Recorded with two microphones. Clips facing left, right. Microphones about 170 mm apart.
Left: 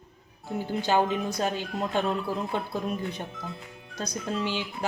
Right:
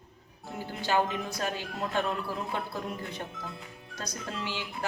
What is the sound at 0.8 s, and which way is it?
Speech, 20° left (ahead or behind).